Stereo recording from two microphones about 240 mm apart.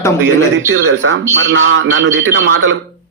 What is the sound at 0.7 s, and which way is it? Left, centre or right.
A man's voice, right.